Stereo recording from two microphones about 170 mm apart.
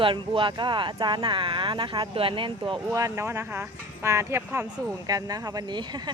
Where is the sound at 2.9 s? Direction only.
15° right (ahead or behind).